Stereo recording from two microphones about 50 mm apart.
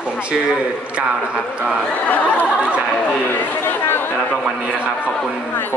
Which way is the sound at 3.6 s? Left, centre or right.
Left.